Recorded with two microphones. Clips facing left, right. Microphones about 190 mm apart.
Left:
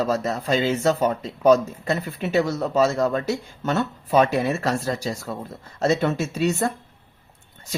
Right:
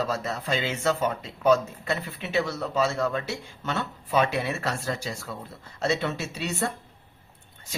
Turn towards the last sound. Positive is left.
turn(degrees=45)  # may be behind; listen again after turning